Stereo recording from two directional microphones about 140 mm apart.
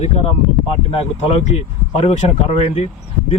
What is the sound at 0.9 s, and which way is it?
Speech, 45° left (ahead or behind).